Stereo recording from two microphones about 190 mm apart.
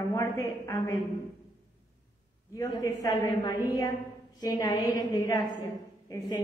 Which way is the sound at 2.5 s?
15° left (ahead or behind).